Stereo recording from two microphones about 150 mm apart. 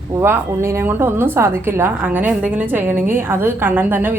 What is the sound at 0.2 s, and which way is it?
A woman's voice, 15° right (ahead or behind).